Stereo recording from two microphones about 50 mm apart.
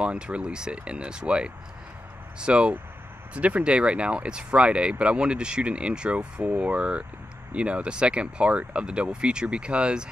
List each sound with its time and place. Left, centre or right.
0.0 s speech: right